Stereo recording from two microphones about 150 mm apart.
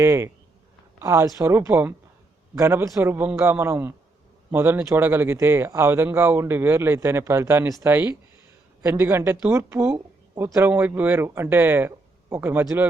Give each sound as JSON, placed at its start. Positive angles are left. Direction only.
{"t": 0.0, "sound": "speech", "side_deg": -20}